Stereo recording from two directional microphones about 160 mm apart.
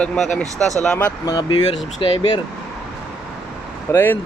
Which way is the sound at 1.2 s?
25° left (ahead or behind).